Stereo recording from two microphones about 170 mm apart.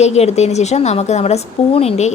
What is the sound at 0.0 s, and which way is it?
A woman's voice, 40° left (ahead or behind).